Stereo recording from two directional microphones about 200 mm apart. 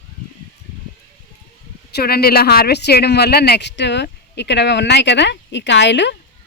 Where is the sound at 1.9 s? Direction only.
55° left (ahead or behind).